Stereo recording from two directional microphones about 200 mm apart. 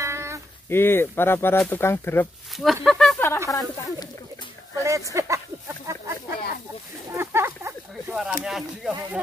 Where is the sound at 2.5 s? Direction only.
Centre (ahead or behind).